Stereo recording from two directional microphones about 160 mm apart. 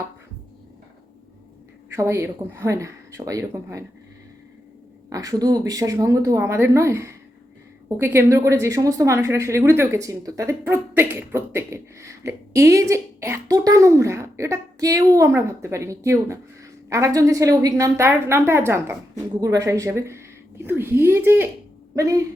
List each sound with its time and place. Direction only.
1.9 s a woman's voice: 15° right (ahead or behind)
5.0 s a woman's voice: 20° right (ahead or behind)